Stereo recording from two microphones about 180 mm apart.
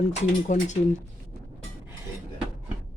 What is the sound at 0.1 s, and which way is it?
Speech, 40° left (ahead or behind).